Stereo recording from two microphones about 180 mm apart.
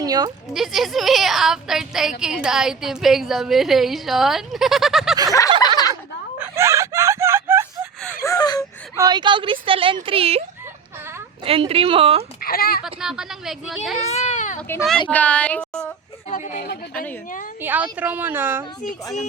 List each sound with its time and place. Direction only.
0.0 s speech: 20° right (ahead or behind)
0.5 s a woman's voice: centre (ahead or behind)
5.5 s speech: 20° left (ahead or behind)
6.4 s a sound: 15° right (ahead or behind)
8.2 s gasp: 20° left (ahead or behind)
9.0 s speech: 25° right (ahead or behind)
11.4 s speech: 30° right (ahead or behind)
12.4 s a sound: 55° left (ahead or behind)
12.8 s a woman's voice: 5° right (ahead or behind)
14.1 s a child's voice: 40° left (ahead or behind)
15.1 s speech: 5° left (ahead or behind)
16.3 s speech: 45° left (ahead or behind)
16.9 s speech: 10° left (ahead or behind)
17.6 s a woman's voice: 10° right (ahead or behind)